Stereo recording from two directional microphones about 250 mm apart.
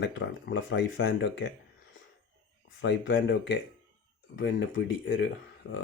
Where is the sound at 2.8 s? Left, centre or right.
Left.